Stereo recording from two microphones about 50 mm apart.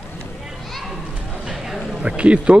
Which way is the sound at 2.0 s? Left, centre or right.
Right.